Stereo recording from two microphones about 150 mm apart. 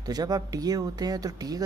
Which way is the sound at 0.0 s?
25° right (ahead or behind).